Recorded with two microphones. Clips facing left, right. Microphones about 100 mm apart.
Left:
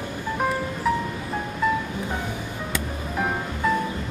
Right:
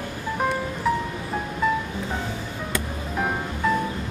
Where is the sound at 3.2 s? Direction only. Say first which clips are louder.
Even; centre (ahead or behind).